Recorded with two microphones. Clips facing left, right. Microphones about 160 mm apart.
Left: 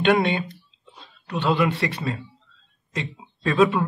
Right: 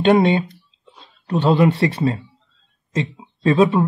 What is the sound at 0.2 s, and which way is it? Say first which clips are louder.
Speech: right 6 dB; 35° right (ahead or behind).